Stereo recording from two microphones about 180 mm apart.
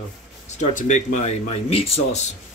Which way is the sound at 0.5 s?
40° left (ahead or behind).